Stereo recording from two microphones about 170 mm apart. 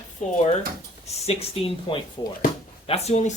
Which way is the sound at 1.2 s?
35° left (ahead or behind).